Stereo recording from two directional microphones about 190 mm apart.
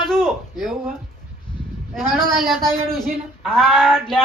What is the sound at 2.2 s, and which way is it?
Speech, centre (ahead or behind).